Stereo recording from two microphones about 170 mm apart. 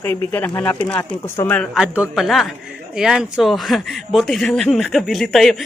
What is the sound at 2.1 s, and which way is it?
Speech, centre (ahead or behind).